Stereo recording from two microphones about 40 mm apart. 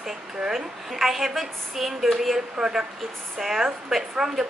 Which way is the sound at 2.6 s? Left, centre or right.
Centre.